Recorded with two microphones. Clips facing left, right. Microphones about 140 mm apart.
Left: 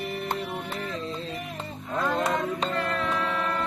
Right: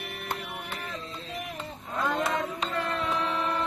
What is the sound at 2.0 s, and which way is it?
Speech, centre (ahead or behind).